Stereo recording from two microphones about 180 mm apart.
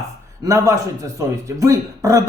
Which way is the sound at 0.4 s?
15° right (ahead or behind).